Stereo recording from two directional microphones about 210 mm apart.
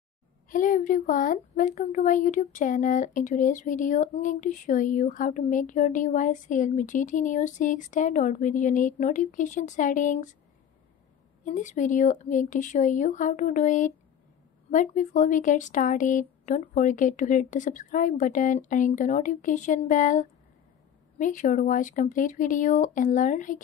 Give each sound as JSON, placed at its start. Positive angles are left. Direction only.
{"t": 0.5, "sound": "a woman's voice", "side_deg": 40}
{"t": 11.4, "sound": "a woman's voice", "side_deg": 35}